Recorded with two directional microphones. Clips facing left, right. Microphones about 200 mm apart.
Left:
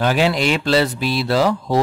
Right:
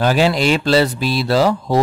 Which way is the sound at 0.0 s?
35° right (ahead or behind).